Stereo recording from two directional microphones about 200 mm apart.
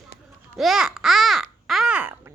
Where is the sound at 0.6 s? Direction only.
Centre (ahead or behind).